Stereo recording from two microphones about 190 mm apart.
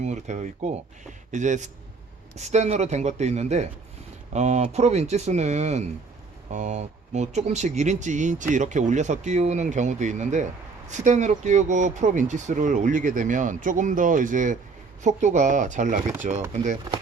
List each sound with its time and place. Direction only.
0.0 s speech: 40° right (ahead or behind)
16.9 s speech: 20° right (ahead or behind)